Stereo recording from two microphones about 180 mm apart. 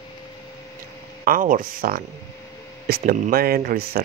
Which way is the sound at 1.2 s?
50° right (ahead or behind).